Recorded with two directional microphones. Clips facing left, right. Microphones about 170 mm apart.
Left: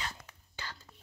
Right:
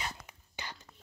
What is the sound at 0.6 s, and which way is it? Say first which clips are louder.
Whispering: right 1 dB; 15° right (ahead or behind).